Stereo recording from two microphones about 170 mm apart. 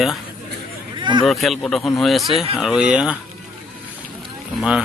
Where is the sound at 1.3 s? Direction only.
Centre (ahead or behind).